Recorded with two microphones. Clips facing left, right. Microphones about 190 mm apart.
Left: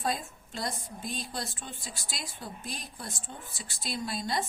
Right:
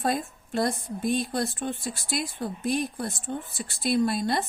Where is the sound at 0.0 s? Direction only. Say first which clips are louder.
Right 5 dB; 55° right (ahead or behind).